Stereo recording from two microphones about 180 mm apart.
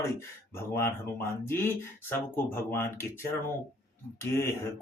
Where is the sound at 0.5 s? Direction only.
15° left (ahead or behind).